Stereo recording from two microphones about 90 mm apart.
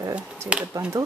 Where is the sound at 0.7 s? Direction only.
40° right (ahead or behind).